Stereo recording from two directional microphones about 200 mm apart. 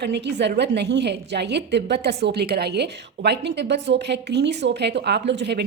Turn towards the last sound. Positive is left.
turn(degrees=-60)  # may be behind; listen again after turning